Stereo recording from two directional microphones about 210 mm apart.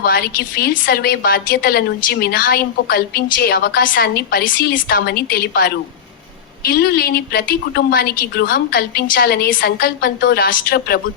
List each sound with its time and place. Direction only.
0.0 s a woman's voice: 45° left (ahead or behind)